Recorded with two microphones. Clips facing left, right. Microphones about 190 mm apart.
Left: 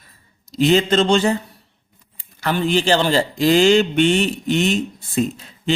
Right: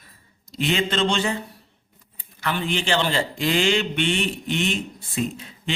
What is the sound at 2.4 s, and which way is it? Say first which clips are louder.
A man's voice: left 7 dB; 40° left (ahead or behind).